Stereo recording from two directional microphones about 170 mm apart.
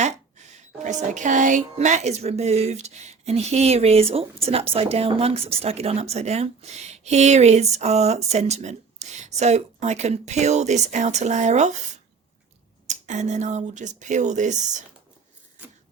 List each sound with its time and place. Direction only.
0.0 s a woman's voice: 45° right (ahead or behind)
12.9 s speech: 45° right (ahead or behind)